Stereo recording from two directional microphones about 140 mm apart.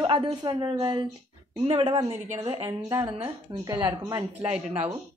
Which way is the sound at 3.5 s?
35° right (ahead or behind).